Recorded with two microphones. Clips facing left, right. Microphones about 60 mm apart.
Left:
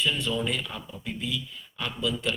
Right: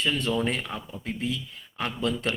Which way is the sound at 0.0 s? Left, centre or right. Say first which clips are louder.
Right 2 dB; right.